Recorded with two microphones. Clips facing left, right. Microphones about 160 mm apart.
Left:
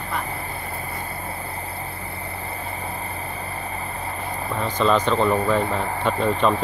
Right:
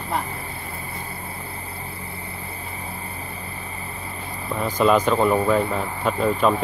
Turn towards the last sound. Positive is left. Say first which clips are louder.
# even
turn(degrees=-5)  # may be behind; listen again after turning